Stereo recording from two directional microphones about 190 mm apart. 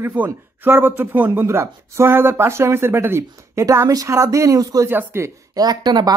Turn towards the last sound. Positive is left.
turn(degrees=-20)  # may be behind; listen again after turning